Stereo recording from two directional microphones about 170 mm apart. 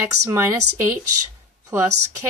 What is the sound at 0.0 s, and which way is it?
Speech, 15° right (ahead or behind).